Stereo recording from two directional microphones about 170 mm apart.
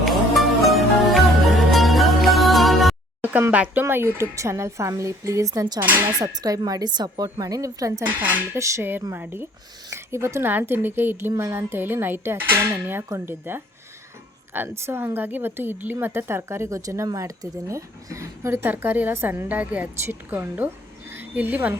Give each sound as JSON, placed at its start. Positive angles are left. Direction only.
{"t": 0.0, "sound": "music", "side_deg": 0}
{"t": 3.2, "sound": "a woman's voice", "side_deg": -10}
{"t": 21.1, "sound": "a sound", "side_deg": -10}